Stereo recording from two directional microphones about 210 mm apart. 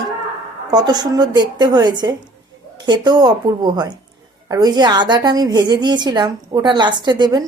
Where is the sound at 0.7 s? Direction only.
20° right (ahead or behind).